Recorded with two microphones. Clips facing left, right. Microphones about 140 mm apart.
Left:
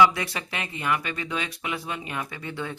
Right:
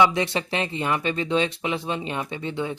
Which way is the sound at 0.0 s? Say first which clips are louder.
Right 1 dB; 25° right (ahead or behind).